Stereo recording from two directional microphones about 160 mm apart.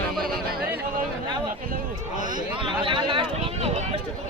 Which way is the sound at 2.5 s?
30° right (ahead or behind).